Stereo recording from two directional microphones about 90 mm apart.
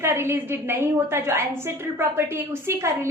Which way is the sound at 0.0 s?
25° right (ahead or behind).